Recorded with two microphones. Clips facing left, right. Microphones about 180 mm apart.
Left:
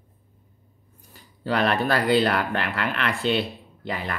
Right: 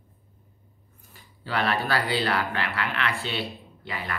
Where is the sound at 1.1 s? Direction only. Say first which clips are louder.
Left 5 dB; 45° left (ahead or behind).